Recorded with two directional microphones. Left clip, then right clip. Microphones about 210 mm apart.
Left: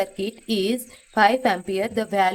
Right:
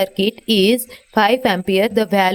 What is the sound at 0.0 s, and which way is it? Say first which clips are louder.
A woman's voice: right 8 dB; 40° right (ahead or behind).